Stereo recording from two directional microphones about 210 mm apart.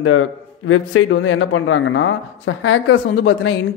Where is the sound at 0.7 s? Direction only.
75° left (ahead or behind).